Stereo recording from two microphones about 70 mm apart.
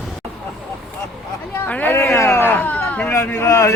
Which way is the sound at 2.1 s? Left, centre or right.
Left.